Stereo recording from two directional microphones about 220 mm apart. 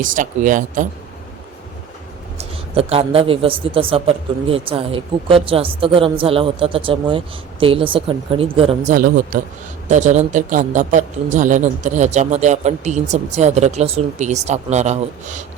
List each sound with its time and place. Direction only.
0.0 s a woman's voice: 35° right (ahead or behind)
2.7 s a man's voice: 25° right (ahead or behind)